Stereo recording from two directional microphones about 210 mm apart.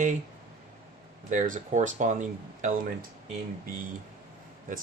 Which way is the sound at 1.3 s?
40° right (ahead or behind).